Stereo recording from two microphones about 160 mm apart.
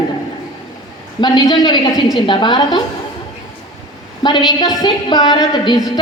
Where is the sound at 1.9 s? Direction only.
Centre (ahead or behind).